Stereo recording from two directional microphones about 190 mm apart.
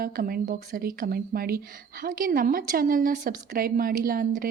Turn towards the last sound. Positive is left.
turn(degrees=-50)  # may be behind; listen again after turning